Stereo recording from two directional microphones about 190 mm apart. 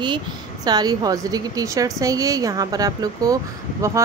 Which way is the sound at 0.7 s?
20° right (ahead or behind).